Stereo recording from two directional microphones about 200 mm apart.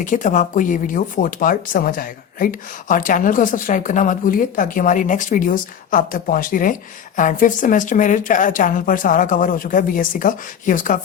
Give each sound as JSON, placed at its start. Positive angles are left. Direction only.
{"t": 0.0, "sound": "speech", "side_deg": 40}